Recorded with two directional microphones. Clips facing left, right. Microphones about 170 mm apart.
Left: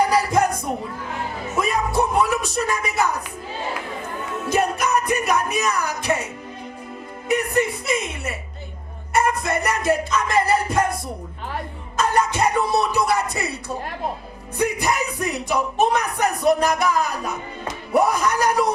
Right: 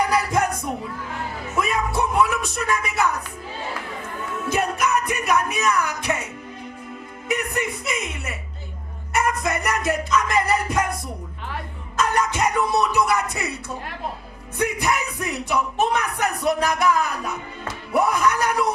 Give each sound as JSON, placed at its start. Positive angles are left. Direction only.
{"t": 0.1, "sound": "music", "side_deg": 35}
{"t": 1.5, "sound": "music", "side_deg": 35}
{"t": 4.4, "sound": "music", "side_deg": 35}
{"t": 9.1, "sound": "speech", "side_deg": 30}
{"t": 11.5, "sound": "music", "side_deg": 30}
{"t": 14.6, "sound": "speech", "side_deg": 35}